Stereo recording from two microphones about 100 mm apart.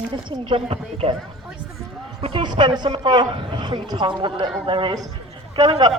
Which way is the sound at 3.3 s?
60° right (ahead or behind).